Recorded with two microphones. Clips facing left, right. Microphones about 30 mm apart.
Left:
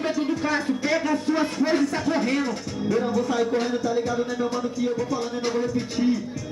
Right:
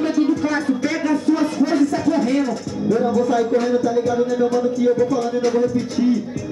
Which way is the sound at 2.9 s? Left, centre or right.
Centre.